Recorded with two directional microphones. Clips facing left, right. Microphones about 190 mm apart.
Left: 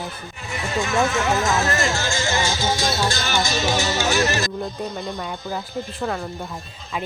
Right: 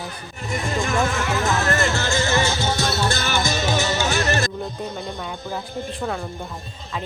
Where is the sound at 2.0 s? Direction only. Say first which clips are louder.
Right 2 dB; 60° right (ahead or behind).